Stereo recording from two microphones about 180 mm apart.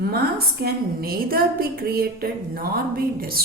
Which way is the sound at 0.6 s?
55° right (ahead or behind).